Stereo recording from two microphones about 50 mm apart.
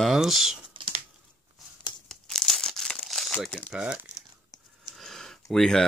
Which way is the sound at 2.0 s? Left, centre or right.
Centre.